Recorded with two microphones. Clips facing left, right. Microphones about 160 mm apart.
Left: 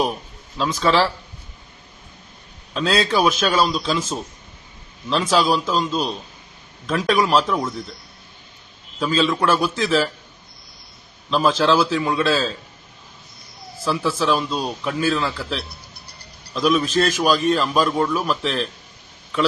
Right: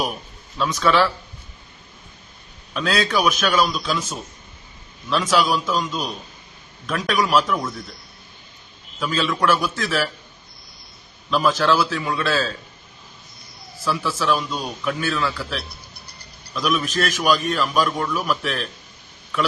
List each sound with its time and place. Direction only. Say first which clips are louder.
0.6 s a man's voice: even; 30° left (ahead or behind)
2.7 s a man's voice: left 2 dB; 30° left (ahead or behind)
9.2 s a man's voice: even; 30° left (ahead or behind)
11.3 s a man's voice: left 1 dB; 30° left (ahead or behind)
13.8 s speech: left 2 dB; 30° left (ahead or behind)
16.6 s a man's voice: left 4 dB; 30° left (ahead or behind)